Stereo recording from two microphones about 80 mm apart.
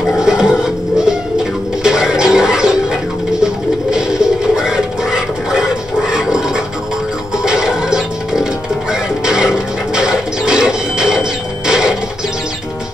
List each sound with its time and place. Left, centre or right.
0.1 s music: centre
9.2 s printer: centre